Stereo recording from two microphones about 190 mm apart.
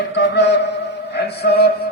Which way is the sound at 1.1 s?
60° left (ahead or behind).